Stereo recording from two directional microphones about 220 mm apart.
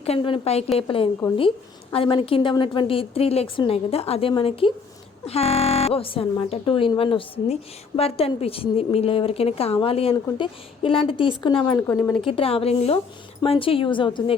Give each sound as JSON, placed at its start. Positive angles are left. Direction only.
{"t": 0.0, "sound": "speech", "side_deg": 25}
{"t": 11.8, "sound": "speech", "side_deg": 10}
{"t": 12.4, "sound": "speech", "side_deg": 25}